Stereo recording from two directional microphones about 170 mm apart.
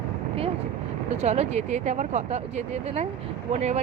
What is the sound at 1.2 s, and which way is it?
Speech, 40° right (ahead or behind).